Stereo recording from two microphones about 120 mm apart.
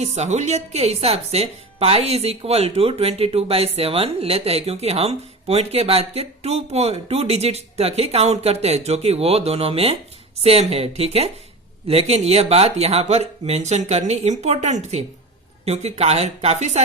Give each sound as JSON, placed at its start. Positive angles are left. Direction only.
{"t": 0.0, "sound": "speech", "side_deg": -65}